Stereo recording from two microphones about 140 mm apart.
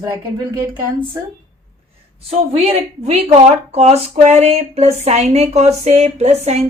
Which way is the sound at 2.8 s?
50° right (ahead or behind).